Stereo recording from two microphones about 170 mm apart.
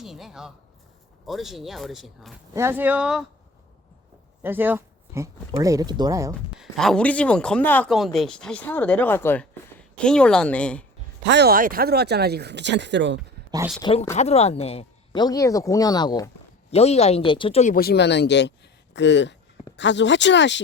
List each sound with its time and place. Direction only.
0.0 s speech: centre (ahead or behind)
2.5 s speech: 15° right (ahead or behind)
4.4 s speech: 10° right (ahead or behind)
6.6 s speech: centre (ahead or behind)
11.3 s speech: 75° right (ahead or behind); by 13.1 s 90° right
13.8 s speech: 25° left (ahead or behind)
14.2 s speech: 40° left (ahead or behind); by 16.3 s 25° left (ahead or behind)
16.7 s speech: 40° left (ahead or behind)
17.7 s speech: 70° left (ahead or behind); by 20.6 s 90° left